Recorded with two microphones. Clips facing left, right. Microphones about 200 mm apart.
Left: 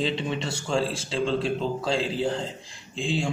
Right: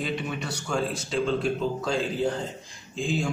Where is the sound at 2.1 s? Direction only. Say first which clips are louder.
Even; 30° left (ahead or behind).